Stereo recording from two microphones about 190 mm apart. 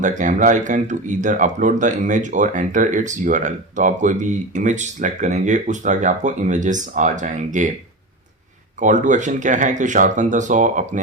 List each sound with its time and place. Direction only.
0.0 s speech: 40° right (ahead or behind)
8.8 s speech: 40° right (ahead or behind)